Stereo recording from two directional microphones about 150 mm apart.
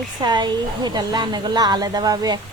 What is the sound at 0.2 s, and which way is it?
A woman's voice, 30° right (ahead or behind).